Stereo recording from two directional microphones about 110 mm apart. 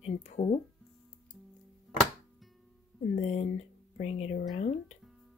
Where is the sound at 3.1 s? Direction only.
90° left.